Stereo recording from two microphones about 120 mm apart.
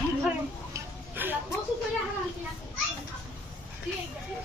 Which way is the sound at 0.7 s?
15° right (ahead or behind).